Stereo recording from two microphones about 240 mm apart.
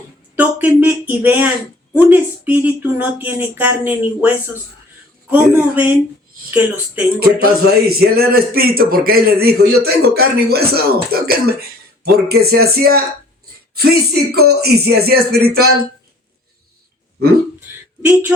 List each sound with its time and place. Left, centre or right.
0.3 s speech: centre
7.2 s speech: right